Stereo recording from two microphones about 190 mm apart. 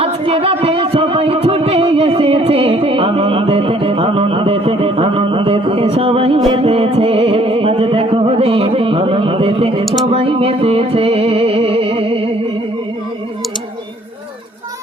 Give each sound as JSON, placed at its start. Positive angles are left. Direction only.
{"t": 0.0, "sound": "music", "side_deg": -30}
{"t": 9.8, "sound": "a sound", "side_deg": 0}
{"t": 10.1, "sound": "music", "side_deg": -30}